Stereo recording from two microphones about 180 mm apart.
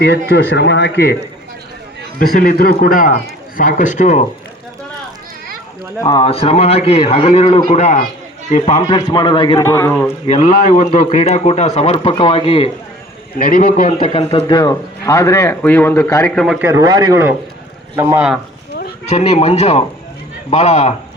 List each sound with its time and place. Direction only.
0.3 s speech: 70° left (ahead or behind)
2.1 s a man's voice: 55° left (ahead or behind)
6.0 s speech: 25° left (ahead or behind); by 8.8 s 40° left (ahead or behind)
8.9 s a man's voice: 25° left (ahead or behind)
9.6 s speech: 15° left (ahead or behind)
10.2 s speech: 35° left (ahead or behind)
10.6 s speech: 50° left (ahead or behind); by 12.7 s 30° left (ahead or behind)
13.4 s a man's voice: 50° left (ahead or behind)
14.0 s speech: 35° left (ahead or behind); by 16.3 s 15° left (ahead or behind)
16.3 s a man's voice: 5° left (ahead or behind)
16.6 s a man's voice: 15° right (ahead or behind)
19.0 s speech: 35° left (ahead or behind)